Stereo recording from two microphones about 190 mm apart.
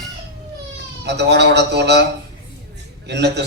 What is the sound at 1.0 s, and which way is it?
Speech, 60° right (ahead or behind).